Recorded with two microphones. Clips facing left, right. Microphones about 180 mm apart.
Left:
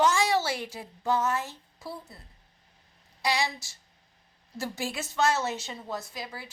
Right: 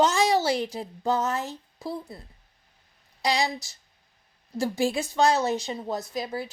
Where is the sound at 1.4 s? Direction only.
15° right (ahead or behind).